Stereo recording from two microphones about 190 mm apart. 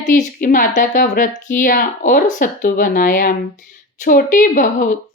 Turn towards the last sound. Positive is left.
turn(degrees=45)  # may be behind; listen again after turning